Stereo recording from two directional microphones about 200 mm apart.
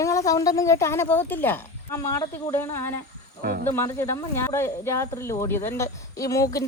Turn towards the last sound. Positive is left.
turn(degrees=15)  # may be behind; listen again after turning